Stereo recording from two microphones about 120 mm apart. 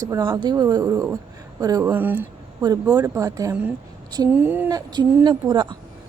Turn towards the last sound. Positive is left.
turn(degrees=-40)  # may be behind; listen again after turning